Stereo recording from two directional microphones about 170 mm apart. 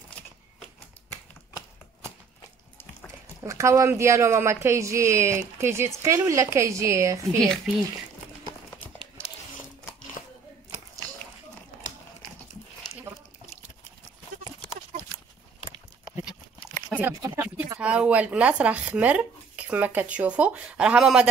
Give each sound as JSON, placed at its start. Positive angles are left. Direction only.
{"t": 3.4, "sound": "speech", "side_deg": -20}
{"t": 7.3, "sound": "speech", "side_deg": 5}
{"t": 16.9, "sound": "a sound", "side_deg": -10}
{"t": 17.7, "sound": "speech", "side_deg": -5}